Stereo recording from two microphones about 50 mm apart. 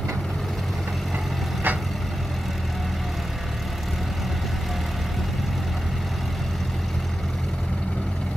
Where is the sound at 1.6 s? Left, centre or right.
Right.